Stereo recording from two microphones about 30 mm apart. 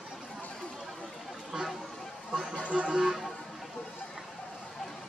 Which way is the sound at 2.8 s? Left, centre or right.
Right.